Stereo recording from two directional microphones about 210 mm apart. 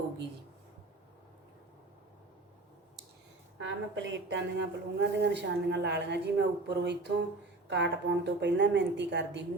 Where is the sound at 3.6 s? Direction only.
60° right (ahead or behind).